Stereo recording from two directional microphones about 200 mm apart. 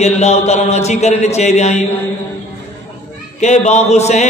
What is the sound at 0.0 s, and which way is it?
A man's voice, 35° left (ahead or behind).